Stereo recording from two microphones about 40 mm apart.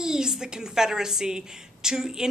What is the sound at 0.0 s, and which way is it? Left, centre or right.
Speech, centre.